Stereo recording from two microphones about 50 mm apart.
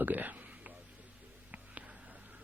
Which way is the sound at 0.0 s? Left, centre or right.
Right.